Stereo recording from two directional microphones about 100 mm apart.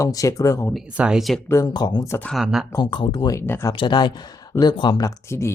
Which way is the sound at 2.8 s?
55° left (ahead or behind).